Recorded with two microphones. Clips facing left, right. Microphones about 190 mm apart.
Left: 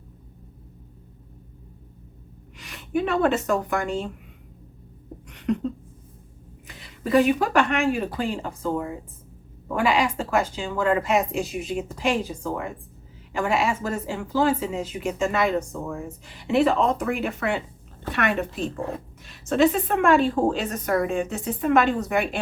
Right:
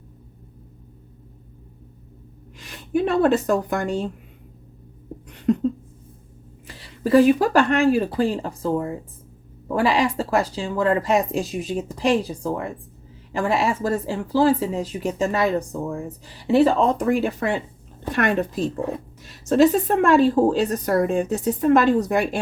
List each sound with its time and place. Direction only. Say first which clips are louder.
2.6 s speech: right 3 dB; 35° right (ahead or behind)
5.3 s a sound: right 5 dB; 35° right (ahead or behind)
6.7 s speech: right 5 dB; 35° right (ahead or behind)